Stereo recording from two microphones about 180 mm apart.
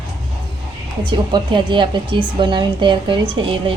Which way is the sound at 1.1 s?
25° right (ahead or behind).